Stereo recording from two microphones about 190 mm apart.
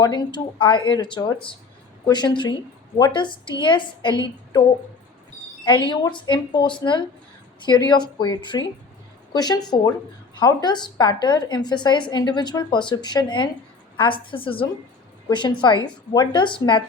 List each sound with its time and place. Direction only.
0.0 s a woman's voice: 20° left (ahead or behind)
5.6 s a woman's voice: 25° left (ahead or behind)